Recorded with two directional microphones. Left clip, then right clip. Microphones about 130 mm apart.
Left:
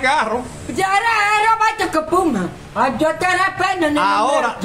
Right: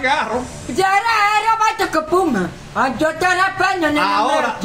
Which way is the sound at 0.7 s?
5° left (ahead or behind).